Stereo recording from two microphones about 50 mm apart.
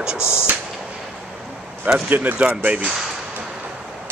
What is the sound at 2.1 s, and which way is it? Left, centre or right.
Speech, right.